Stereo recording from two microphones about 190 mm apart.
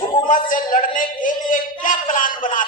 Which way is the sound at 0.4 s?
45° left (ahead or behind).